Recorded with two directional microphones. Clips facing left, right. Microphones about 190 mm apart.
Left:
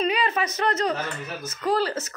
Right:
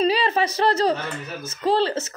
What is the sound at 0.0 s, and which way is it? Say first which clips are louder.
A woman's voice: right 4 dB; 30° right (ahead or behind).